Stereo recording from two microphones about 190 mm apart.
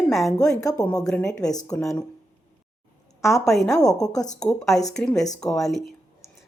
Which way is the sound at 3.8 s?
20° left (ahead or behind).